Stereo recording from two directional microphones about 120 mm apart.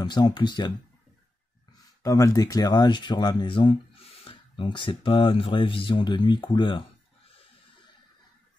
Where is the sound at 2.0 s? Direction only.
30° left (ahead or behind).